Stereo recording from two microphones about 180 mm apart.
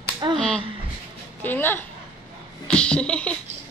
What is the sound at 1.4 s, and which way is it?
Speech, 10° left (ahead or behind).